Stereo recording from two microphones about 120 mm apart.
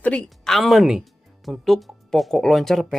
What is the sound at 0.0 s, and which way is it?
Speech, 10° left (ahead or behind).